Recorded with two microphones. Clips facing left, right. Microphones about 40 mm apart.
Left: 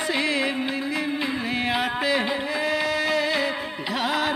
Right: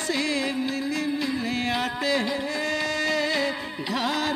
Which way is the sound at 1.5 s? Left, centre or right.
Centre.